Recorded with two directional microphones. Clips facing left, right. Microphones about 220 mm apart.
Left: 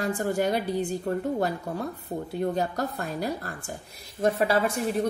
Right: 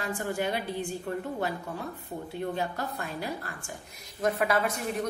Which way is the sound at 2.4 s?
40° left (ahead or behind).